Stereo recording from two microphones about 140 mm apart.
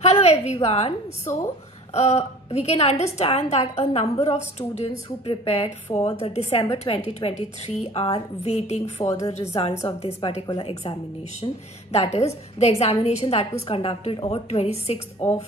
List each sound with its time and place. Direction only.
0.0 s a woman's voice: 50° left (ahead or behind)
10.4 s speech: 30° left (ahead or behind)
10.7 s a woman's voice: 45° left (ahead or behind)